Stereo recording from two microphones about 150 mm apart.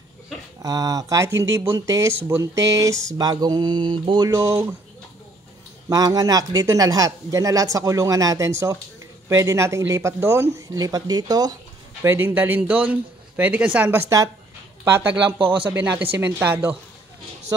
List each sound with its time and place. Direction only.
0.6 s speech: 25° right (ahead or behind)
5.9 s speech: 25° right (ahead or behind)
15.3 s speech: 35° right (ahead or behind)
15.6 s speech: 10° right (ahead or behind)